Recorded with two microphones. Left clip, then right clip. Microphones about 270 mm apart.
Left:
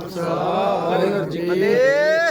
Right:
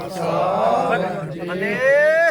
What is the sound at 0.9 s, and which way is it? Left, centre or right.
Speech, left.